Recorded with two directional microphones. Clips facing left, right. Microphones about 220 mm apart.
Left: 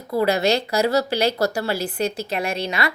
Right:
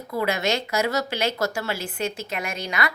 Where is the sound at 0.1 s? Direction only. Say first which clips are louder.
Left 5 dB; 35° left (ahead or behind).